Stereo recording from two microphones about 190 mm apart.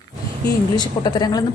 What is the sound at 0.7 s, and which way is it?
Speech, 20° left (ahead or behind).